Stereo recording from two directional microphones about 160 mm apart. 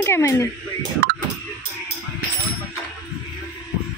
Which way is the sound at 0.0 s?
15° left (ahead or behind).